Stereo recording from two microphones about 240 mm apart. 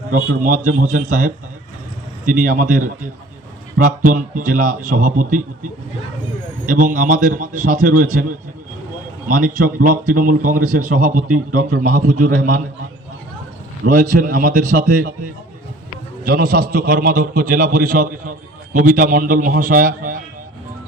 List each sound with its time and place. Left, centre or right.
0.1 s a man's voice: right
6.7 s a man's voice: right
9.2 s a man's voice: right
13.8 s a man's voice: right
16.2 s a man's voice: right